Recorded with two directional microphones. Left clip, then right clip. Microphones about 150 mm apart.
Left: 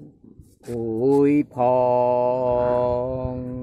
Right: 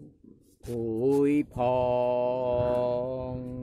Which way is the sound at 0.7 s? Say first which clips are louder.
Left 6 dB; 20° left (ahead or behind).